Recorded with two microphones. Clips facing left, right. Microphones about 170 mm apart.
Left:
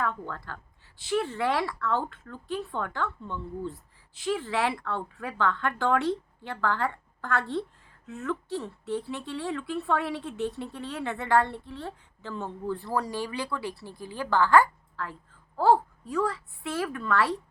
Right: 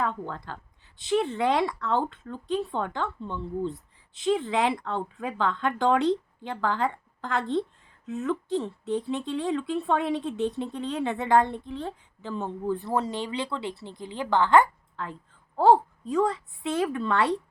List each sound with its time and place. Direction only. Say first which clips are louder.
0.0 s speech: right 2 dB; 20° right (ahead or behind)